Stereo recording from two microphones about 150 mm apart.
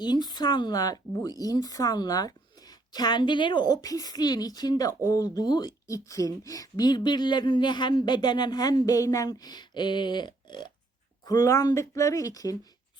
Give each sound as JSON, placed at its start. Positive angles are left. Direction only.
{"t": 0.0, "sound": "speech", "side_deg": 30}